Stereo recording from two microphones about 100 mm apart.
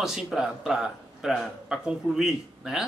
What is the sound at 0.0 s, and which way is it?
Speech, 5° right (ahead or behind).